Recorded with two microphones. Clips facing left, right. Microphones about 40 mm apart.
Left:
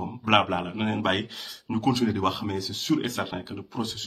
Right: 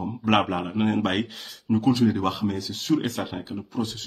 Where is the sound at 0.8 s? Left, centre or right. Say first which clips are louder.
Right 4 dB; left.